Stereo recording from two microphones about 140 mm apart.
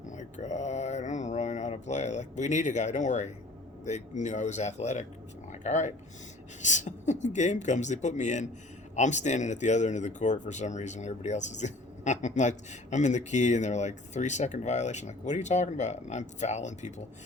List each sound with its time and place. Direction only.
0.2 s mantra: 55° left (ahead or behind)
3.8 s speech: 55° left (ahead or behind)